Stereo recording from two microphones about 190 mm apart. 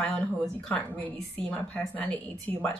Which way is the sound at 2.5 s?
30° right (ahead or behind).